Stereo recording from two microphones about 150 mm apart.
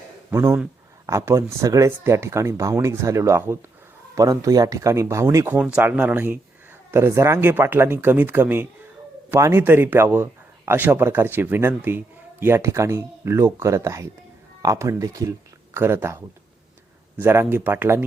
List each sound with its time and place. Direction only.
0.3 s a man's voice: 15° right (ahead or behind)
5.5 s a man's voice: 10° right (ahead or behind)